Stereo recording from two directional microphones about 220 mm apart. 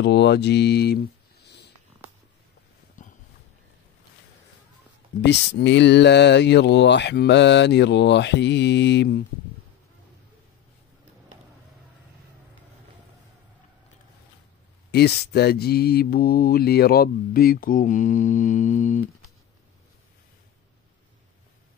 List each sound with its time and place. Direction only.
0.0 s mantra: 50° left (ahead or behind)
3.0 s a sound: 35° left (ahead or behind)
5.2 s mantra: 50° left (ahead or behind)
14.9 s mantra: 50° left (ahead or behind)